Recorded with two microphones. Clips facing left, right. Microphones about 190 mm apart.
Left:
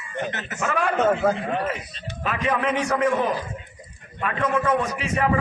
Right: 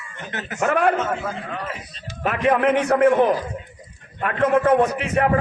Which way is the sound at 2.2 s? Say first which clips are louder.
Right 6 dB; 60° right (ahead or behind).